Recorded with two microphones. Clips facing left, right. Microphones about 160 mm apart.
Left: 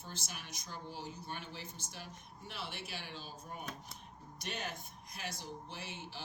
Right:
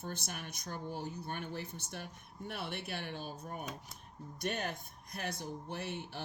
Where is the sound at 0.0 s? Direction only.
55° right (ahead or behind).